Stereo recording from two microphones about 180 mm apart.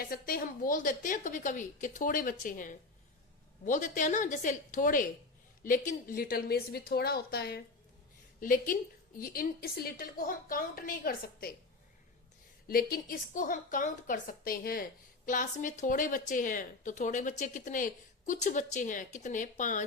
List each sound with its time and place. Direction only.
0.0 s a woman's voice: 55° left (ahead or behind)
8.4 s a woman's voice: 50° left (ahead or behind)
12.6 s a woman's voice: 55° left (ahead or behind)
15.3 s a woman's voice: 45° left (ahead or behind)